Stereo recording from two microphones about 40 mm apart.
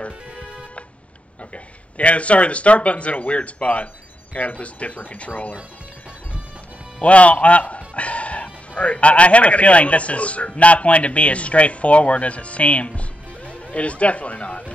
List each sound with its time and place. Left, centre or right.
1.4 s speech: left
7.0 s a man's voice: left